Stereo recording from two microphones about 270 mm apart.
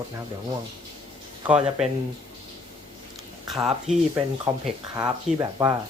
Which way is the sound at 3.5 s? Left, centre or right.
Centre.